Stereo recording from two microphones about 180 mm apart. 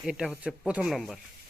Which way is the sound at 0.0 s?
5° right (ahead or behind).